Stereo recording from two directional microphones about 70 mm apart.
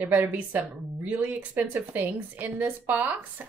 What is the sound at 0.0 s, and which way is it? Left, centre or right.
Speech, right.